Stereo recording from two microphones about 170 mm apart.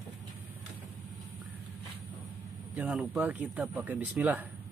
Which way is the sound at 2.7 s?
5° right (ahead or behind).